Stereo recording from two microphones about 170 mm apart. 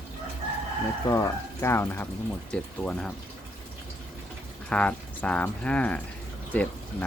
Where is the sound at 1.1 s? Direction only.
15° left (ahead or behind).